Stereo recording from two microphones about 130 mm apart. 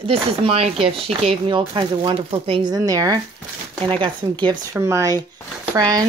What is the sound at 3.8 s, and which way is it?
Speech, 45° right (ahead or behind).